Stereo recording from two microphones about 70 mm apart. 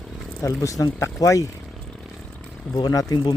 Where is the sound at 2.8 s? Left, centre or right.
Left.